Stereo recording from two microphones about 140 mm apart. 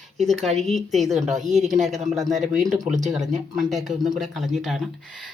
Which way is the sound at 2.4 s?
Centre (ahead or behind).